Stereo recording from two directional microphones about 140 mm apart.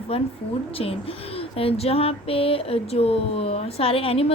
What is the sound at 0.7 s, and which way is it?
A woman's voice, 45° left (ahead or behind).